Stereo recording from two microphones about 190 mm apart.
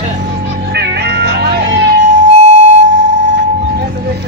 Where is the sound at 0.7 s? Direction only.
60° right (ahead or behind).